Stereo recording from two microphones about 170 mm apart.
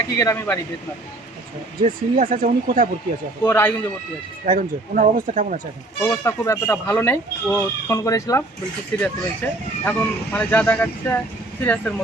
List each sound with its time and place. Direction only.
0.2 s speech: 15° left (ahead or behind)
1.8 s speech: 55° right (ahead or behind)
3.4 s speech: 10° left (ahead or behind)
4.4 s speech: 50° right (ahead or behind)
6.0 s speech: 15° left (ahead or behind)
9.0 s speech: 5° left (ahead or behind)